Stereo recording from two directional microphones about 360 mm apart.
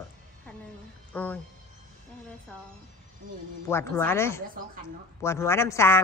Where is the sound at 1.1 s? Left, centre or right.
Centre.